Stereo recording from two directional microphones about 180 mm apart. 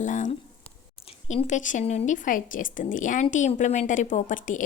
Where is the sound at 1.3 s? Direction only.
40° left (ahead or behind).